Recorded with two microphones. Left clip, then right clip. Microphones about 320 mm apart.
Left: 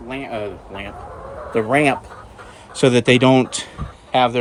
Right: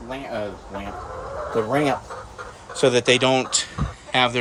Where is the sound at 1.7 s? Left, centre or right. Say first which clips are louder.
Left 8 dB; left.